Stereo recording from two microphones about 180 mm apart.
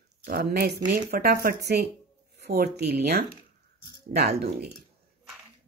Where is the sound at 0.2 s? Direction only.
60° right (ahead or behind).